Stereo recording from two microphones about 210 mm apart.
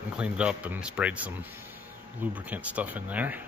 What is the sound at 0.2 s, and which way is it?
Speech, 5° right (ahead or behind).